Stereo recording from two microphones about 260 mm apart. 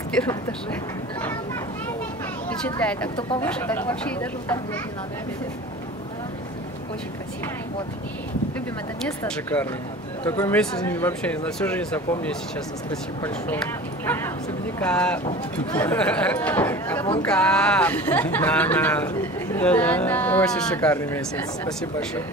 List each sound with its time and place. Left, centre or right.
0.1 s speech: centre
2.8 s speech: centre
3.2 s speech: centre
3.4 s speech: centre
9.2 s speech: centre
14.0 s speech: centre